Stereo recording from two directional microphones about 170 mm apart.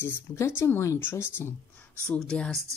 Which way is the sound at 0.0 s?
15° left (ahead or behind).